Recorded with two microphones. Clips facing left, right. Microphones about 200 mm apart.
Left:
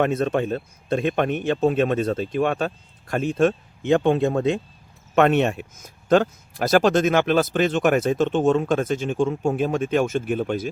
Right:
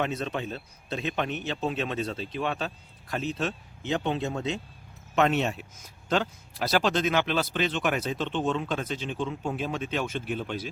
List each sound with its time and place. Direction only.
0.0 s speech: 50° left (ahead or behind)